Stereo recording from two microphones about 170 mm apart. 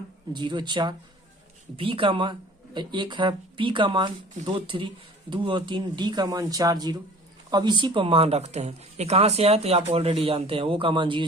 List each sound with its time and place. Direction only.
0.3 s speech: 25° right (ahead or behind)